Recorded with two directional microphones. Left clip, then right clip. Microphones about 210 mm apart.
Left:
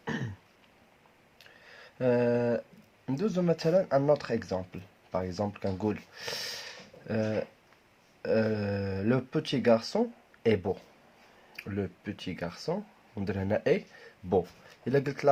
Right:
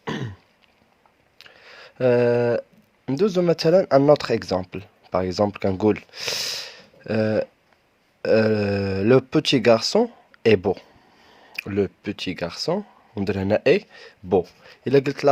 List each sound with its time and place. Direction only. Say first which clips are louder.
0.0 s throat clearing: right 6 dB; 50° right (ahead or behind)
1.4 s a sound: right 8 dB; 50° right (ahead or behind)
3.1 s speech: right 10 dB; 50° right (ahead or behind)